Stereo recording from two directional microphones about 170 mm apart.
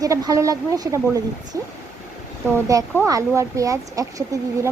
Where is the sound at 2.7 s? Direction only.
20° right (ahead or behind).